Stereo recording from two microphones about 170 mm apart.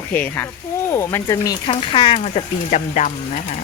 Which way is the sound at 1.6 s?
30° left (ahead or behind).